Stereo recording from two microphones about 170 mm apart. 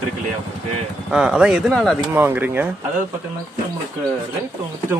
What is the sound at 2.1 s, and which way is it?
Speech, 10° right (ahead or behind).